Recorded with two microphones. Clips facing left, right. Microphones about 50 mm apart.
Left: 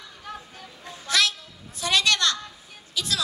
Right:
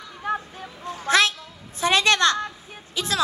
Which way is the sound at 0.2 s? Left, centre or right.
Right.